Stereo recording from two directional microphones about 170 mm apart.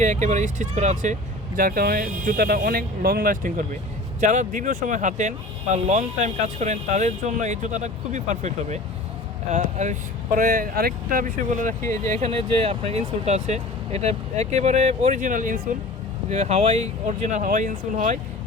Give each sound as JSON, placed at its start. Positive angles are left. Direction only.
{"t": 0.0, "sound": "speech", "side_deg": -45}
{"t": 1.5, "sound": "speech", "side_deg": -60}
{"t": 16.3, "sound": "speech", "side_deg": -40}